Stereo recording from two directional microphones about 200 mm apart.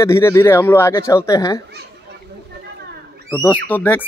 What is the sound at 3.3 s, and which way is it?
Speech, 10° left (ahead or behind).